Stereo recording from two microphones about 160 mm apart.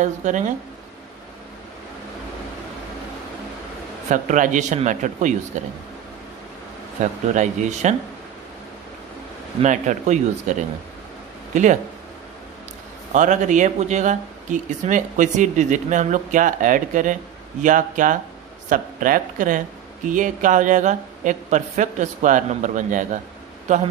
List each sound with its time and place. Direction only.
0.0 s speech: 50° right (ahead or behind)
4.1 s speech: 50° right (ahead or behind)
7.0 s speech: 45° right (ahead or behind)
9.6 s speech: 50° right (ahead or behind)
13.1 s speech: 50° right (ahead or behind)